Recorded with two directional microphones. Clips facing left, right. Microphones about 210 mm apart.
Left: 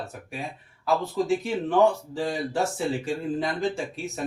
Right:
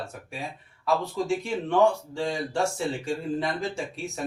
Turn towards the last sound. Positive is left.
turn(degrees=0)  # may be behind; listen again after turning